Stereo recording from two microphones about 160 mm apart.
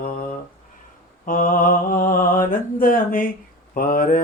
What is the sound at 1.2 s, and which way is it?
Speech, 60° left (ahead or behind).